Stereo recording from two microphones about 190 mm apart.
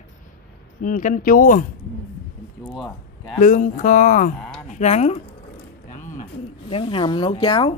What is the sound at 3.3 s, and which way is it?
Speech, 40° left (ahead or behind).